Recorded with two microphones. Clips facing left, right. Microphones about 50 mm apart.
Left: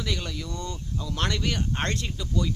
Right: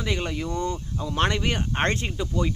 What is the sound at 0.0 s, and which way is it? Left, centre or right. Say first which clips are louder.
Speech: right 5 dB; right.